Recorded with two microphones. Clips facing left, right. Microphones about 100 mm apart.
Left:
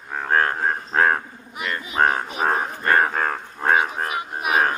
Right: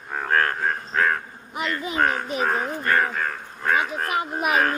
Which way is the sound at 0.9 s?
35° left (ahead or behind).